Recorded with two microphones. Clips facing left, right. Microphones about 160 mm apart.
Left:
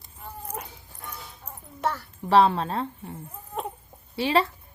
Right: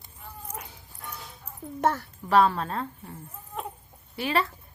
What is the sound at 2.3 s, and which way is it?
Speech, 30° left (ahead or behind).